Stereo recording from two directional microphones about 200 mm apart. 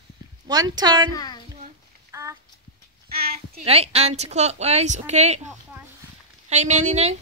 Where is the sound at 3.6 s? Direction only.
30° right (ahead or behind).